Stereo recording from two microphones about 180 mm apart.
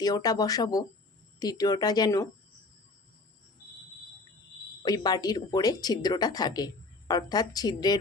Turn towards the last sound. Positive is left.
turn(degrees=20)  # may be behind; listen again after turning